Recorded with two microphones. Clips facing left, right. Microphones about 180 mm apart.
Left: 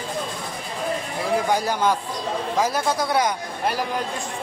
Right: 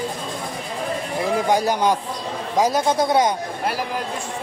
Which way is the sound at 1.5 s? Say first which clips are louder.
Right 3 dB; 20° right (ahead or behind).